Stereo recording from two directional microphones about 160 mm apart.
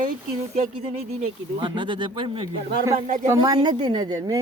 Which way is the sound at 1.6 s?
30° right (ahead or behind).